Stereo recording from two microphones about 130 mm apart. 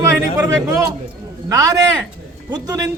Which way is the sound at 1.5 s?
25° right (ahead or behind).